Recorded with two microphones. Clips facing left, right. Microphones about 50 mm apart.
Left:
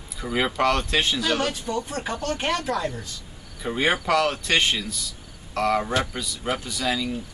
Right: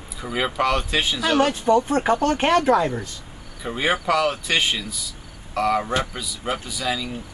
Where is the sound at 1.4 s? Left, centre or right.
Right.